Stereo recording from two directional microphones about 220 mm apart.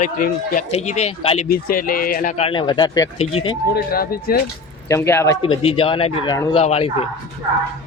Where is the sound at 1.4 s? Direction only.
40° left (ahead or behind); by 3.1 s 20° left (ahead or behind).